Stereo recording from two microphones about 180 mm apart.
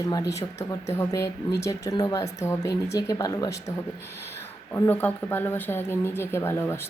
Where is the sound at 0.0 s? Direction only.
20° left (ahead or behind).